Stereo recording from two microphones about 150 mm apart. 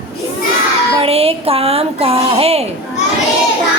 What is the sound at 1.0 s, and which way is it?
Speech, 40° right (ahead or behind).